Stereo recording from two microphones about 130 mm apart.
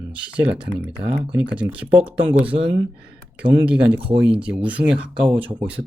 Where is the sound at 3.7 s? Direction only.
10° right (ahead or behind).